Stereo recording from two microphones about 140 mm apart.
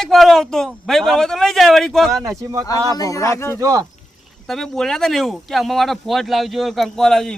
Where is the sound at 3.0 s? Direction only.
25° left (ahead or behind).